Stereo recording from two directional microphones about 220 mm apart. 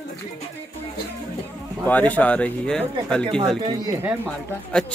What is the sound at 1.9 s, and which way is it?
Speech, 10° left (ahead or behind).